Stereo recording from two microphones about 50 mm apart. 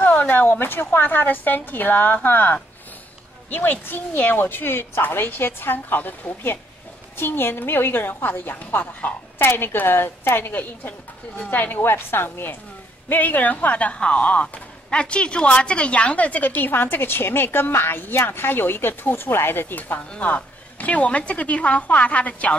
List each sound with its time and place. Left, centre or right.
0.0 s a woman's voice: left
9.4 s a woman's voice: left
11.9 s a woman's voice: left
13.1 s a woman's voice: left
16.7 s a woman's voice: left
20.1 s a woman's voice: left